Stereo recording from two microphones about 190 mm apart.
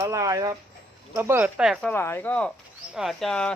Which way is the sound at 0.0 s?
15° right (ahead or behind).